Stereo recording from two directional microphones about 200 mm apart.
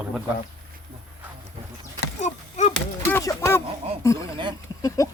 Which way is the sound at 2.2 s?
35° left (ahead or behind).